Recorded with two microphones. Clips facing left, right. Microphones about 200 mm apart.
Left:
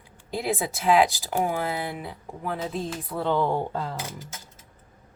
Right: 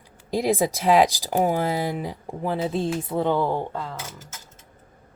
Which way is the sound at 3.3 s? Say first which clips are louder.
Right 1 dB; centre (ahead or behind).